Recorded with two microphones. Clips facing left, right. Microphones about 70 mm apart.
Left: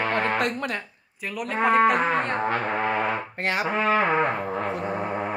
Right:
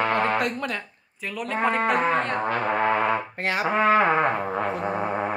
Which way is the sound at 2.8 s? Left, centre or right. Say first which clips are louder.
Right 3 dB; right.